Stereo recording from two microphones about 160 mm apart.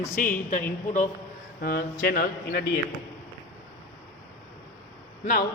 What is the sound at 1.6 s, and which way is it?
A man's voice, 70° left (ahead or behind).